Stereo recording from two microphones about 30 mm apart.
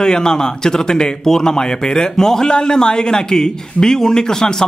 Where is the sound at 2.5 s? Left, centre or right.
Left.